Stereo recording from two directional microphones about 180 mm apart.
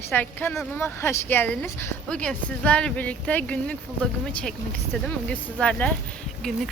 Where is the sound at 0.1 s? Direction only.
10° left (ahead or behind).